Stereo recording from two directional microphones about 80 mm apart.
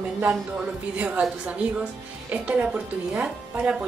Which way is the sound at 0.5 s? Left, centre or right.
Centre.